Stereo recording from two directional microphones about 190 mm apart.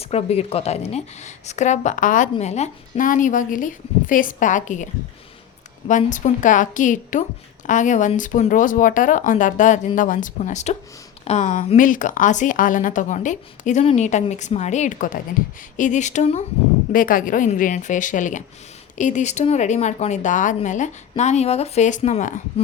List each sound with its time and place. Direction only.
0.0 s a woman's voice: 35° left (ahead or behind)
5.9 s a woman's voice: 40° left (ahead or behind)